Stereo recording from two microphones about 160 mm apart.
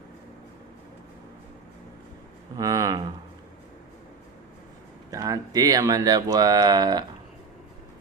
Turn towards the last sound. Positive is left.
turn(degrees=-25)  # may be behind; listen again after turning